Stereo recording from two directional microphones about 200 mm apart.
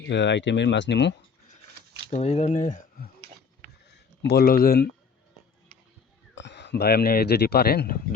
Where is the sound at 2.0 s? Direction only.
35° left (ahead or behind).